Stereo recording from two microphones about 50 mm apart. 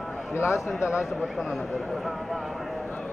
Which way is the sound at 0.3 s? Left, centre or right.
Left.